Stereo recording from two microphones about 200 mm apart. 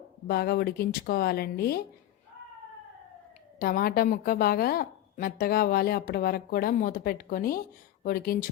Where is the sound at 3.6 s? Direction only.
45° left (ahead or behind).